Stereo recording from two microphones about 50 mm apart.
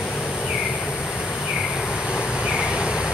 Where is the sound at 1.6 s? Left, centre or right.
Centre.